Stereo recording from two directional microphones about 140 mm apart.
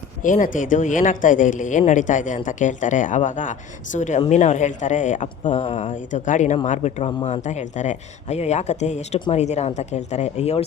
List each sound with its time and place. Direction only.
0.2 s speech: 65° left (ahead or behind); by 10.6 s 50° left (ahead or behind)